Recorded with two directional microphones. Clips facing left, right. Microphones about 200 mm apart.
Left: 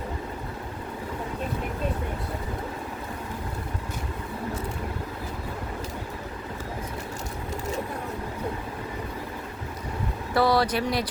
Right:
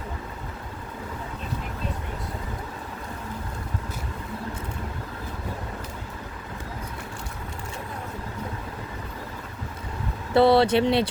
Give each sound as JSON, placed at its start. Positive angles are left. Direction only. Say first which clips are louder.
{"t": 10.3, "sound": "speech", "louder": "right 5 dB", "side_deg": -25}